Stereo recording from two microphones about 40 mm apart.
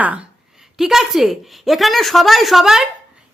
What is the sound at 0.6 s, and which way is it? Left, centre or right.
A woman's voice, centre.